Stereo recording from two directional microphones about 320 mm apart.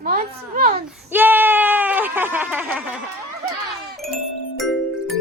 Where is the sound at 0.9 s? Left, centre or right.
Centre.